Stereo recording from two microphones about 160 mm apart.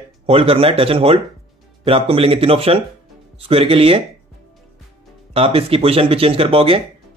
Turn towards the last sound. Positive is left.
turn(degrees=-35)  # may be behind; listen again after turning